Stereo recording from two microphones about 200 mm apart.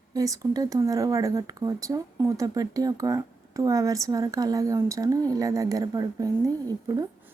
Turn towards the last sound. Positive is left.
turn(degrees=-20)  # may be behind; listen again after turning